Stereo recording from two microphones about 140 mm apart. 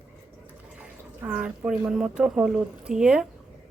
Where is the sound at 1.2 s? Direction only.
10° right (ahead or behind).